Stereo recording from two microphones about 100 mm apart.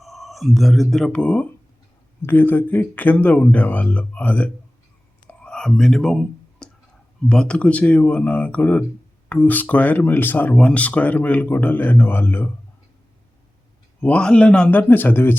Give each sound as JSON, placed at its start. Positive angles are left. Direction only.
{"t": 0.0, "sound": "speech", "side_deg": 0}
{"t": 5.3, "sound": "whispering", "side_deg": 10}
{"t": 7.3, "sound": "speech", "side_deg": 10}
{"t": 14.0, "sound": "speech", "side_deg": 10}